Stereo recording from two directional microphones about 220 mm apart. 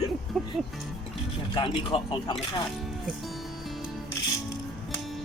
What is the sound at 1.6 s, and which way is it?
Speech, 25° left (ahead or behind).